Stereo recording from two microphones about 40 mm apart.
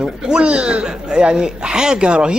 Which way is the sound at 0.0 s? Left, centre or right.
Right.